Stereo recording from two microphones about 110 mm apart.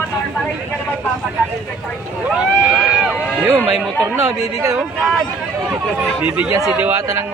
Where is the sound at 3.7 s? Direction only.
Centre (ahead or behind).